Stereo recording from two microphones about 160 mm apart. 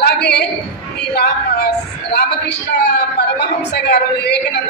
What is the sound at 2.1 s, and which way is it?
Speech, 90° left.